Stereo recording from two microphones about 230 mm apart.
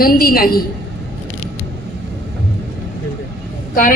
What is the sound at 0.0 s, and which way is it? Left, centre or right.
Speech, left.